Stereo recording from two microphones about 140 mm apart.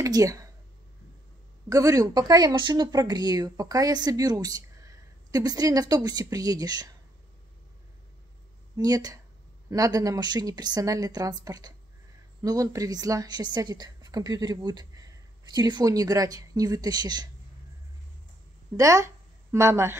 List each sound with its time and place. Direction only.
0.0 s speech: 25° right (ahead or behind)
1.7 s speech: 25° right (ahead or behind)
8.7 s speech: 25° right (ahead or behind)
18.8 s a woman's voice: 20° right (ahead or behind)